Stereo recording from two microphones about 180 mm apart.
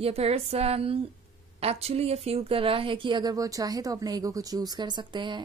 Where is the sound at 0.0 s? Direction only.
35° right (ahead or behind).